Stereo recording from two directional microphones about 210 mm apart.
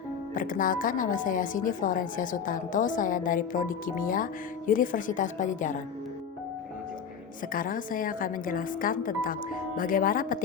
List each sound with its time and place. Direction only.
0.3 s a woman's voice: 40° left (ahead or behind)
7.5 s a woman's voice: 40° left (ahead or behind)